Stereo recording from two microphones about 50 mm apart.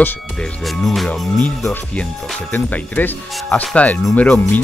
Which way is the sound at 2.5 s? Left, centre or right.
Left.